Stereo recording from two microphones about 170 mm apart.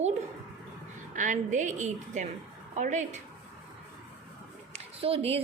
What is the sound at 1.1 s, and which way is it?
A woman's voice, 50° right (ahead or behind).